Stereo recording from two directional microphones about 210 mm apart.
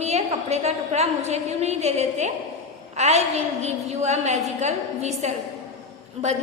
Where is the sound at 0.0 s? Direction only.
30° right (ahead or behind).